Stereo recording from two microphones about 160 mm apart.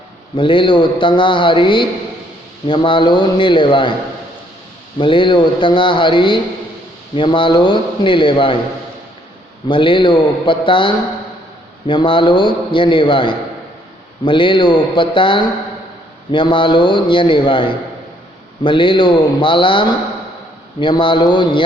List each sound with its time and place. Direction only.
0.3 s a man's voice: 30° left (ahead or behind)
4.9 s a man's voice: 30° left (ahead or behind)
9.6 s a man's voice: 30° left (ahead or behind)
20.7 s a sound: 30° left (ahead or behind)